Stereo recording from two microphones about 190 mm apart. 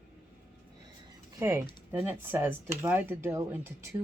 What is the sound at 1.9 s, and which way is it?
Speech, 10° right (ahead or behind).